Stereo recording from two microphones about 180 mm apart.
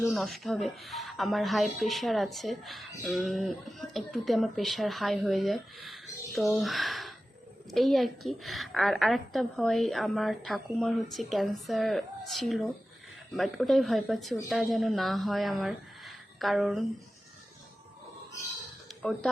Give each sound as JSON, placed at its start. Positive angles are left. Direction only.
{"t": 0.0, "sound": "a woman's voice", "side_deg": 0}
{"t": 19.0, "sound": "a woman's voice", "side_deg": 5}